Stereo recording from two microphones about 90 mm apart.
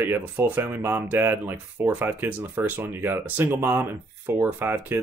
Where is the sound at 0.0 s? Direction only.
20° right (ahead or behind).